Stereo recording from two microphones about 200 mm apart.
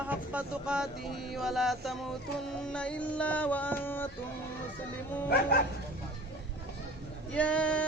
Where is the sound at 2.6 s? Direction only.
5° left (ahead or behind).